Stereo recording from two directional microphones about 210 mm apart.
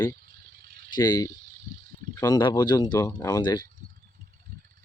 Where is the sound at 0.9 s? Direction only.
20° left (ahead or behind).